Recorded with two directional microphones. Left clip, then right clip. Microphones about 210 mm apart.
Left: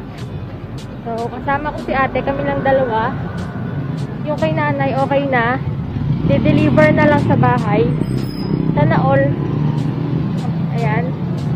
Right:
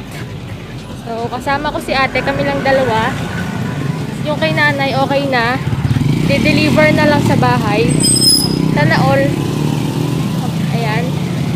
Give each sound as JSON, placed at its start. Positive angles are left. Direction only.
{"t": 1.5, "sound": "speech", "side_deg": -15}
{"t": 4.4, "sound": "speech", "side_deg": -20}
{"t": 10.8, "sound": "vehicle", "side_deg": -15}